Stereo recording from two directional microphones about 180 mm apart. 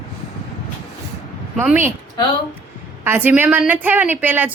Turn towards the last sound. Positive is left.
turn(degrees=-10)  # may be behind; listen again after turning